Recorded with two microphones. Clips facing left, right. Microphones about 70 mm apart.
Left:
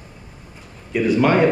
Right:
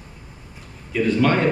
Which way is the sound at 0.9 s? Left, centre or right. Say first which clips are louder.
Left 2 dB; centre.